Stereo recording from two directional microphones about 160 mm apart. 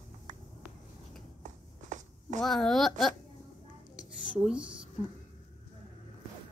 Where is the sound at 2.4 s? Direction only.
Centre (ahead or behind).